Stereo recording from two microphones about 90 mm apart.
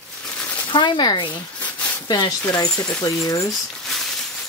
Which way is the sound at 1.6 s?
15° left (ahead or behind).